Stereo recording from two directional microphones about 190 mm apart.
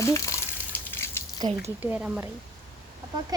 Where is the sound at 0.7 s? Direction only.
10° left (ahead or behind).